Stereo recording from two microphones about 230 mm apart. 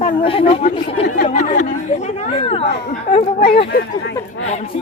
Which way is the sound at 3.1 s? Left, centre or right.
Left.